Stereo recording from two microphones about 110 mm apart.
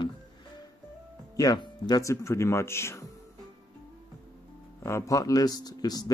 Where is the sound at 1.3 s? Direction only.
35° left (ahead or behind).